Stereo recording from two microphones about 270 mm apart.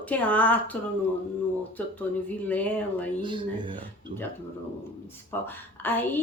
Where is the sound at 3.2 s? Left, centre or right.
Centre.